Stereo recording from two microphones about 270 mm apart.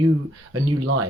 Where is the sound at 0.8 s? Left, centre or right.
Right.